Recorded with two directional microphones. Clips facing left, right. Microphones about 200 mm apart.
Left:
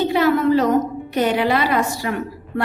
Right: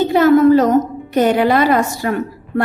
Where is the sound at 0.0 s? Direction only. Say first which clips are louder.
Right 6 dB; 45° right (ahead or behind).